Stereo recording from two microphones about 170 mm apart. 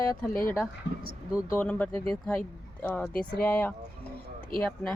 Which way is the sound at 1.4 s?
10° left (ahead or behind).